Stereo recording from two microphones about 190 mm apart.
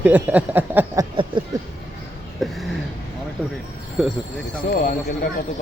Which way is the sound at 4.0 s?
Centre (ahead or behind).